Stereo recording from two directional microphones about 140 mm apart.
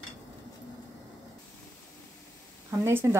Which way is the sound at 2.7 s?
15° right (ahead or behind).